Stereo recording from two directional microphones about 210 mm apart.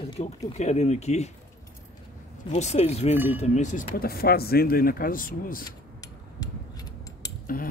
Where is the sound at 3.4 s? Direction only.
35° left (ahead or behind).